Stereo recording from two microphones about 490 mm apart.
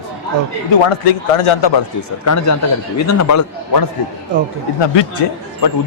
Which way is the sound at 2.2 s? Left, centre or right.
Left.